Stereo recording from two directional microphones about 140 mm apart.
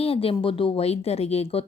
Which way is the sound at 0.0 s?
45° left (ahead or behind).